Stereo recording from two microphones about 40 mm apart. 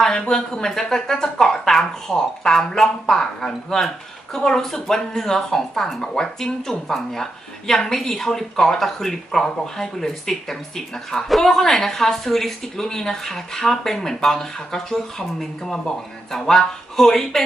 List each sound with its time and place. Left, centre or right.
0.0 s speech: centre